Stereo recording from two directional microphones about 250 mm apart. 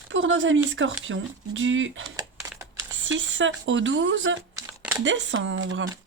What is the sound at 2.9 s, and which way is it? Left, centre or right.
Speech, right.